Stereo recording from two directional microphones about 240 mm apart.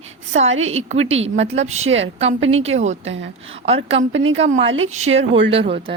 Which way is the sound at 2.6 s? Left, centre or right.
Right.